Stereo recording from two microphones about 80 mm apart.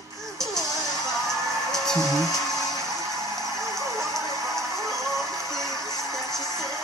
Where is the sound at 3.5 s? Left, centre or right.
Right.